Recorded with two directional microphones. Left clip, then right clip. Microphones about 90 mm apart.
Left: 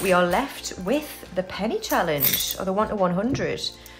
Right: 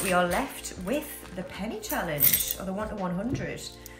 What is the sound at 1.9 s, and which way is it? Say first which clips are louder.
Speech: left 7 dB; 50° left (ahead or behind).